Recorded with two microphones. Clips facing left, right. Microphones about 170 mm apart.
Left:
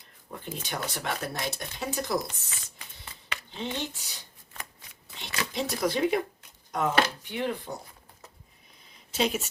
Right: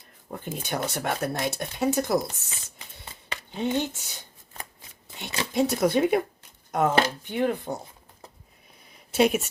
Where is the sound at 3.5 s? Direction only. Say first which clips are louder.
Right 8 dB; 50° right (ahead or behind).